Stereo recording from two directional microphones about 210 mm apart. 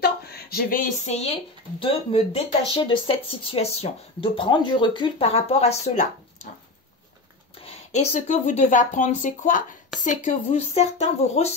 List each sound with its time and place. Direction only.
0.0 s speech: 50° left (ahead or behind); by 6.5 s 35° left (ahead or behind)
7.6 s speech: 30° left (ahead or behind)